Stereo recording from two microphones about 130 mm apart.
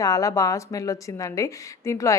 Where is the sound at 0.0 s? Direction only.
25° left (ahead or behind).